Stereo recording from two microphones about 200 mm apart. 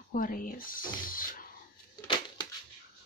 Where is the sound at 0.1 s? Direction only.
45° left (ahead or behind).